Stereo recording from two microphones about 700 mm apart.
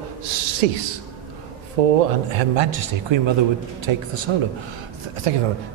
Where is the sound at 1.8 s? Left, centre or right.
Right.